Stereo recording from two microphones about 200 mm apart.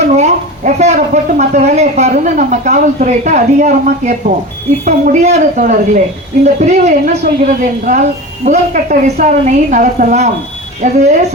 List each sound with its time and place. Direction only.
0.2 s a woman's voice: 35° right (ahead or behind)